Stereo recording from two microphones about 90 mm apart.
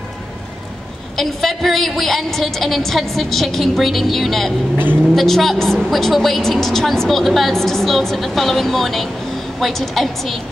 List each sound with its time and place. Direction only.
1.1 s a woman's voice: centre (ahead or behind)